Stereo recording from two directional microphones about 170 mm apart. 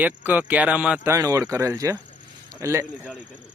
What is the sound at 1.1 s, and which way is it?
A man's voice, 20° right (ahead or behind).